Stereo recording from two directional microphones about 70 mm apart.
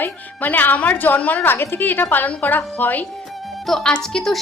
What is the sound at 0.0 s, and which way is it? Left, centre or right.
A woman's voice, left.